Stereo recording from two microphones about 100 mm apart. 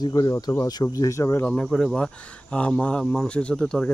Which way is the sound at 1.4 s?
10° left (ahead or behind).